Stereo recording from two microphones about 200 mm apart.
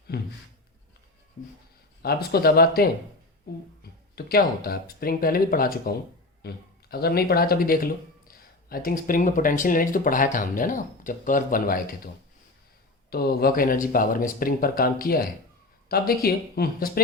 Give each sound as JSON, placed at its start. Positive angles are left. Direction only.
{"t": 0.1, "sound": "speech", "side_deg": 50}
{"t": 2.0, "sound": "speech", "side_deg": 50}
{"t": 3.5, "sound": "a sound", "side_deg": 50}
{"t": 4.1, "sound": "speech", "side_deg": 50}
{"t": 13.1, "sound": "speech", "side_deg": 50}